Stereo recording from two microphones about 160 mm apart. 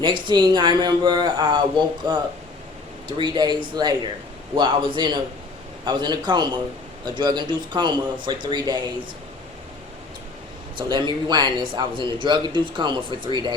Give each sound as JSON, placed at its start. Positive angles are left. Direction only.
{"t": 0.0, "sound": "a man's voice", "side_deg": -30}
{"t": 10.8, "sound": "a man's voice", "side_deg": -30}